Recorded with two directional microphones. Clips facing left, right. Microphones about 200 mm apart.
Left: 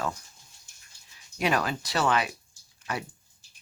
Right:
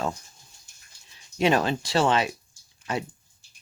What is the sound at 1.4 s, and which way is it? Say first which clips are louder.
Speech: right 5 dB; 25° right (ahead or behind).